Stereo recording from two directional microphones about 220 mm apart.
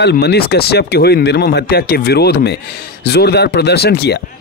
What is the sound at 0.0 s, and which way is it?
Speech, 50° left (ahead or behind).